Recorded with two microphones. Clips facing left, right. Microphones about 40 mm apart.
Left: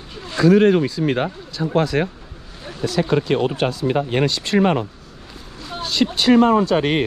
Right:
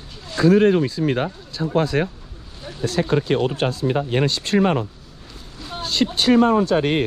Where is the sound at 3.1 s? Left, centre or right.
Left.